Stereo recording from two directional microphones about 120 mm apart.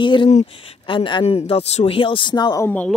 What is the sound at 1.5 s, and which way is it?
Speech, 60° left (ahead or behind).